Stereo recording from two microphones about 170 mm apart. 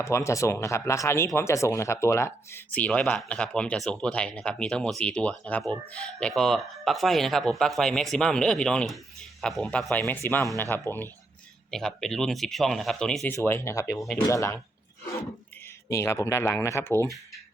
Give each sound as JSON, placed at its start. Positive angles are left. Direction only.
{"t": 0.0, "sound": "speech", "side_deg": 15}
{"t": 15.9, "sound": "speech", "side_deg": 15}